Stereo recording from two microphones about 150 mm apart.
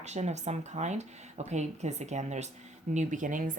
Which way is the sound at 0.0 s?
50° right (ahead or behind).